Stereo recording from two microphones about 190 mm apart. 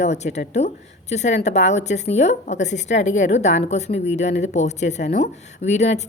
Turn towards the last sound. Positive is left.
turn(degrees=35)  # may be behind; listen again after turning